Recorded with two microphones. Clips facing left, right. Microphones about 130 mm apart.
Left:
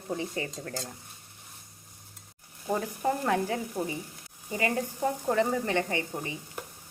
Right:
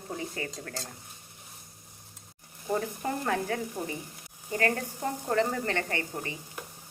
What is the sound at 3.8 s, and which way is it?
Frying, 5° left (ahead or behind).